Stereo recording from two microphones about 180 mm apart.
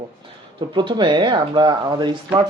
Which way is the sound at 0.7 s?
25° right (ahead or behind).